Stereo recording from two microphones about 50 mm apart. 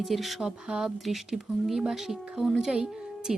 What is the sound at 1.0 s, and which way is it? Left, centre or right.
Speech, centre.